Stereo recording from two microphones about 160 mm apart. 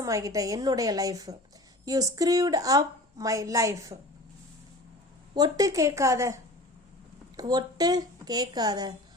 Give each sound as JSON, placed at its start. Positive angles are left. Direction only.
{"t": 0.0, "sound": "a woman's voice", "side_deg": -20}
{"t": 5.3, "sound": "a woman's voice", "side_deg": -25}